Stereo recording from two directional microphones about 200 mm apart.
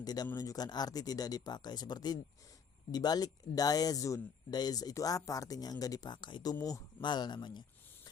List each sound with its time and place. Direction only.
0.0 s speech: 20° left (ahead or behind)